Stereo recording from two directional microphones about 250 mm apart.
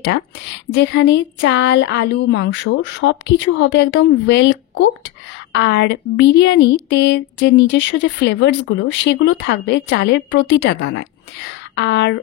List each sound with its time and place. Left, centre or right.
0.7 s speech: left